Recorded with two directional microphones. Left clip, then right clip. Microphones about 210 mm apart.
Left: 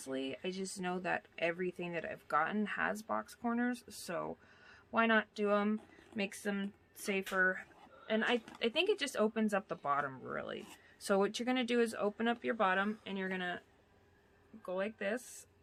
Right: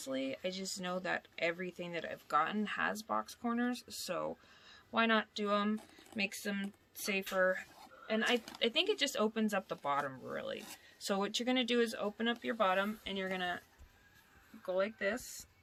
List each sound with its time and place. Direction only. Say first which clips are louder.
0.0 s speech: right 2 dB; 20° left (ahead or behind)
14.6 s speech: right 3 dB; 20° left (ahead or behind)